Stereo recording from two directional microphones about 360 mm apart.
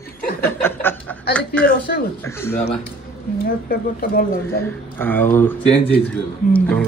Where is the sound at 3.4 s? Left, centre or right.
Left.